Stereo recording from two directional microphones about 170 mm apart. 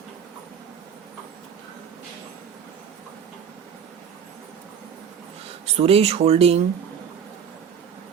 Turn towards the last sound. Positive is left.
turn(degrees=-35)  # may be behind; listen again after turning